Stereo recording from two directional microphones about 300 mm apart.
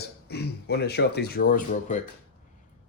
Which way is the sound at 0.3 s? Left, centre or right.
Left.